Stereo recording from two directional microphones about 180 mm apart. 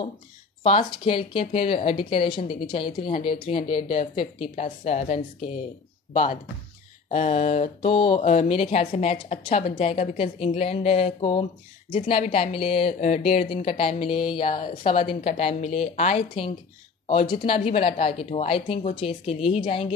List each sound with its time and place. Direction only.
0.9 s speech: 30° left (ahead or behind)
3.0 s a woman's voice: 50° left (ahead or behind)
7.1 s speech: 40° left (ahead or behind)